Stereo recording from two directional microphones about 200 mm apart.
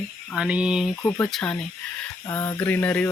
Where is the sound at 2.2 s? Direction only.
15° left (ahead or behind).